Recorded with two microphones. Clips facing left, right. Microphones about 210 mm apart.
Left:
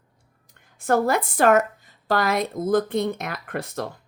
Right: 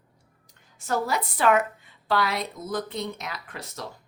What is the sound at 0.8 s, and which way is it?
A woman's voice, 55° left (ahead or behind).